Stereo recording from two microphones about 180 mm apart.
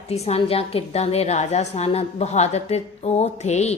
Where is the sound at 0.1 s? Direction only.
35° left (ahead or behind).